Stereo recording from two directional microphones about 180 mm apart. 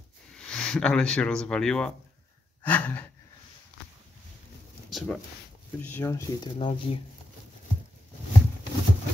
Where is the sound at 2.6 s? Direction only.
10° left (ahead or behind).